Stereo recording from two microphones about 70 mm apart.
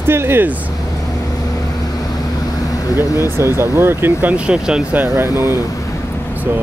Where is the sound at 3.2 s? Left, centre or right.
Right; by 4.8 s centre.